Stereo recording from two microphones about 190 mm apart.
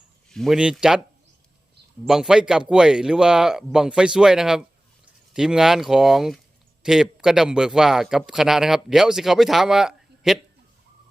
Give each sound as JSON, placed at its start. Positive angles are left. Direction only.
{"t": 0.3, "sound": "a man's voice", "side_deg": 0}
{"t": 2.0, "sound": "a man's voice", "side_deg": 0}